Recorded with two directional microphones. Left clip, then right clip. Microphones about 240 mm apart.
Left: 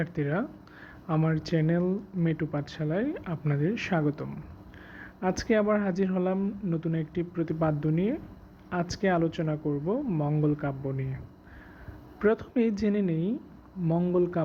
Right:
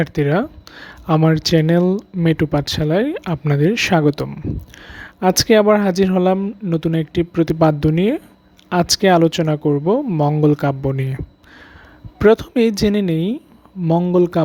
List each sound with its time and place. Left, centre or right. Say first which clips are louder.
0.0 s speech: right 13 dB; right
12.2 s speech: right 13 dB; right